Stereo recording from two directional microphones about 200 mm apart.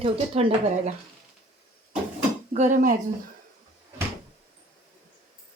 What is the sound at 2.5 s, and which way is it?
Speech, 40° right (ahead or behind).